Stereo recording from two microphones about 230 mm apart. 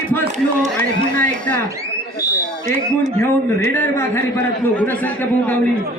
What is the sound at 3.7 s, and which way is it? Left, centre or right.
A man's voice, centre.